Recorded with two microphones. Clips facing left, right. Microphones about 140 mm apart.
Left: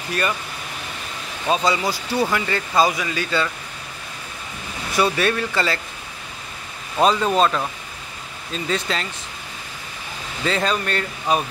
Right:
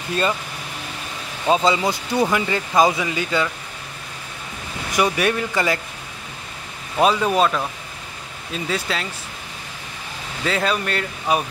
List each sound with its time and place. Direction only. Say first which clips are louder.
1.5 s speech: right 2 dB; 20° right (ahead or behind)
4.9 s speech: even; 15° right (ahead or behind)
7.0 s speech: even; 10° right (ahead or behind)
8.6 s speech: left 1 dB; 5° right (ahead or behind)
10.4 s speech: even; 5° right (ahead or behind)